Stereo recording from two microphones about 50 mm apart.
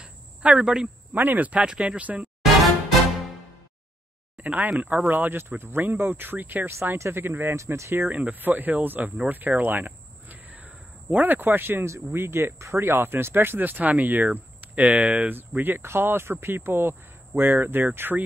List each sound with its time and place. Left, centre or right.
0.0 s a sound: centre
1.1 s speech: right
1.5 s speech: right
2.6 s music: centre
4.4 s speech: right
7.0 s speech: right
7.5 s speech: right
8.1 s speech: right
9.3 s caw: right
11.8 s speech: right
12.8 s speech: right